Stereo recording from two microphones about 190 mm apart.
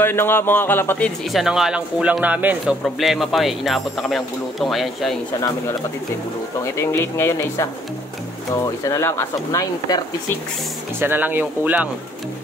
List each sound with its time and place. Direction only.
0.0 s a man's voice: 10° left (ahead or behind)
6.6 s speech: 15° left (ahead or behind)
11.0 s speech: 10° right (ahead or behind)